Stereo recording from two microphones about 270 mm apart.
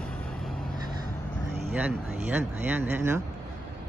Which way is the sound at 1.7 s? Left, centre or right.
Centre.